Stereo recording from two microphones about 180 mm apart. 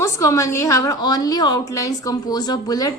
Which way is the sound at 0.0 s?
15° left (ahead or behind).